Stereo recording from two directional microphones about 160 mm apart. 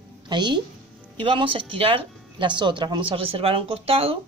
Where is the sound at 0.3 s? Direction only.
30° right (ahead or behind).